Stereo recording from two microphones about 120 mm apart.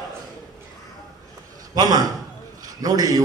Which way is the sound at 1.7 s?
35° right (ahead or behind).